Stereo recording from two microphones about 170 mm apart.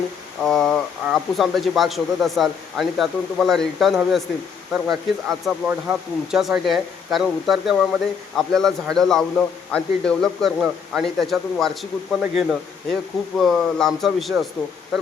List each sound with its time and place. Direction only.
0.4 s speech: centre (ahead or behind)